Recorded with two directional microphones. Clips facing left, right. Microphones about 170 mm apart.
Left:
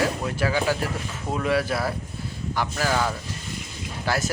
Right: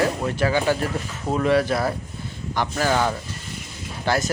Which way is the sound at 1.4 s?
5° left (ahead or behind).